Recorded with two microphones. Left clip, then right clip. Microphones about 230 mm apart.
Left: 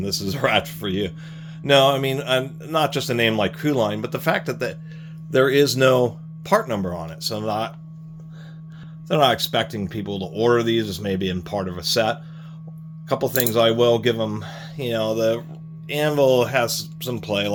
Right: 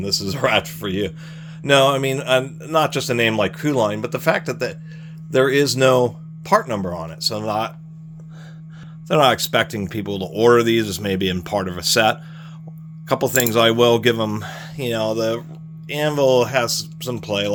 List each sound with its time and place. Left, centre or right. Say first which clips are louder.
0.0 s speech: right 2 dB; centre
9.0 s speech: right 3 dB; right